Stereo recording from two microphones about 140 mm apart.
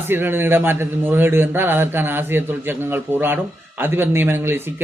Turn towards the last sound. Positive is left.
turn(degrees=-15)  # may be behind; listen again after turning